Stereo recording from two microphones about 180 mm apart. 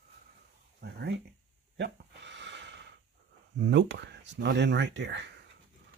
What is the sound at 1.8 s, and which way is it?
Gasp, 80° right.